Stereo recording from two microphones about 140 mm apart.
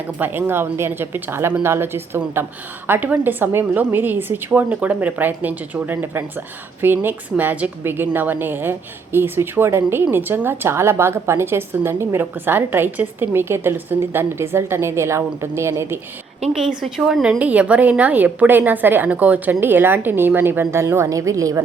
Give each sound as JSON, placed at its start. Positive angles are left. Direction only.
{"t": 0.2, "sound": "a woman's voice", "side_deg": -15}
{"t": 16.5, "sound": "a woman's voice", "side_deg": 0}